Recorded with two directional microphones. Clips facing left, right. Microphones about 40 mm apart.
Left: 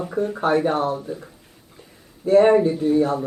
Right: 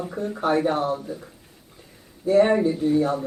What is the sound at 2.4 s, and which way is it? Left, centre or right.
Speech, centre.